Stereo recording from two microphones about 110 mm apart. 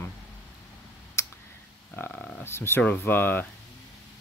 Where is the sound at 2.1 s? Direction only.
5° left (ahead or behind).